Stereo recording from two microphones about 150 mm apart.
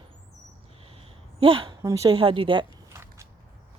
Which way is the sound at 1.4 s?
35° right (ahead or behind).